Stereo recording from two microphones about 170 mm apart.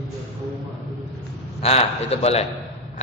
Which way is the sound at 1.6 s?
35° left (ahead or behind).